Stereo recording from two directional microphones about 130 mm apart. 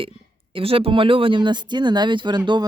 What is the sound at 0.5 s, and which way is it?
Speech, 45° right (ahead or behind).